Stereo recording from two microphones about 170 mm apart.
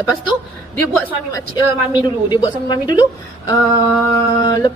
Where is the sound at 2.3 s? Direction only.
25° left (ahead or behind).